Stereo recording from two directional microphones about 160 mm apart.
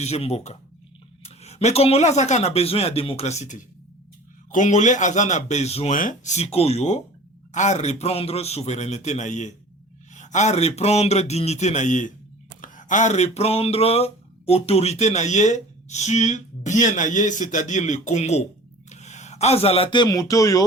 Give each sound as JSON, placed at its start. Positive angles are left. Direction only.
{"t": 0.0, "sound": "speech", "side_deg": 40}
{"t": 4.5, "sound": "a sound", "side_deg": 50}
{"t": 18.9, "sound": "a man's voice", "side_deg": 45}